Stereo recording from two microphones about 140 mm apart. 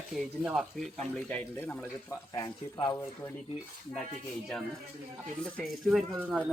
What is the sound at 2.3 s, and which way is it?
Speech, 25° left (ahead or behind).